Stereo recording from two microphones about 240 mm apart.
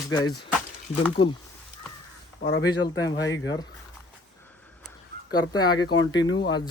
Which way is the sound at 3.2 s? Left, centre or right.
Centre.